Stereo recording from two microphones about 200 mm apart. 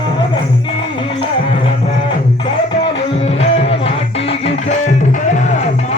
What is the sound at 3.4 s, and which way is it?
Music, 30° left (ahead or behind).